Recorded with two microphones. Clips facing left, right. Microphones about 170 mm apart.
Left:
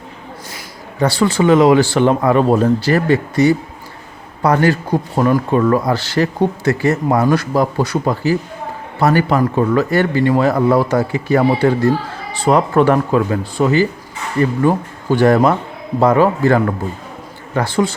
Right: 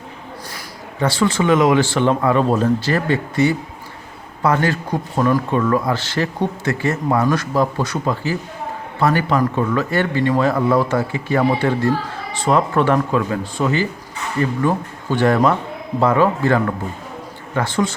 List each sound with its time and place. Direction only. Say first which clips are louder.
0.9 s speech: left 3 dB; 35° left (ahead or behind)
15.1 s speech: left 4 dB; 35° left (ahead or behind)